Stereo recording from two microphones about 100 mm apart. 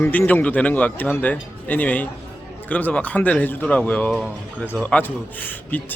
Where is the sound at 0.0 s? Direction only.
20° left (ahead or behind).